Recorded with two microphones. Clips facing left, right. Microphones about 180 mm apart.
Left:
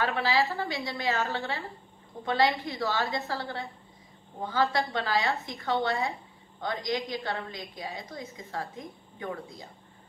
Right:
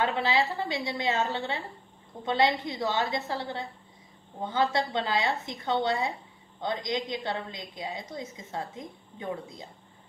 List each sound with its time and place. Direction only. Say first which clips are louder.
0.0 s a woman's voice: even; 20° right (ahead or behind)